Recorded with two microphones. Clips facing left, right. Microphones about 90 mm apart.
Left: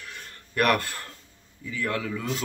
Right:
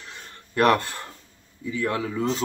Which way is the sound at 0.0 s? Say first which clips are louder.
Even; 25° right (ahead or behind).